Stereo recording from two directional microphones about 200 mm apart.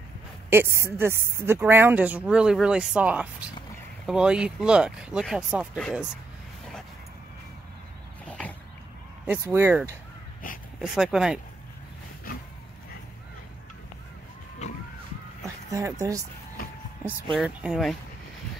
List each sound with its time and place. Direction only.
0.5 s speech: 10° right (ahead or behind)
8.3 s a sound: 5° left (ahead or behind)
9.2 s speech: 10° right (ahead or behind)
15.7 s speech: 15° right (ahead or behind)
17.3 s speech: 5° right (ahead or behind)